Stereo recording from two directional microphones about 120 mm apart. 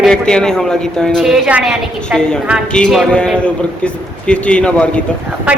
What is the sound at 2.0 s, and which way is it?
A man's voice, 5° left (ahead or behind).